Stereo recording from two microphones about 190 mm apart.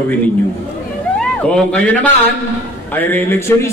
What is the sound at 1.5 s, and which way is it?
A man's voice, 5° left (ahead or behind).